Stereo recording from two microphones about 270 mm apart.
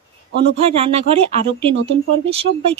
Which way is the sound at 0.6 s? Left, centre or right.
Right.